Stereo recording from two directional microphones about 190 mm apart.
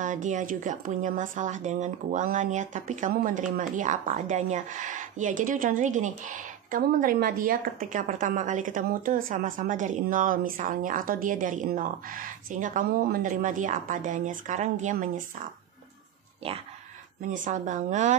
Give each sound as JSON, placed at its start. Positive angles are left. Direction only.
{"t": 0.0, "sound": "a woman's voice", "side_deg": -40}
{"t": 16.4, "sound": "a woman's voice", "side_deg": -30}